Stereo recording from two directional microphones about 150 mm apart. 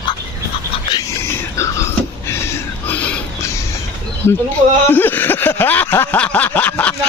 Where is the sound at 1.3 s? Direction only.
20° left (ahead or behind).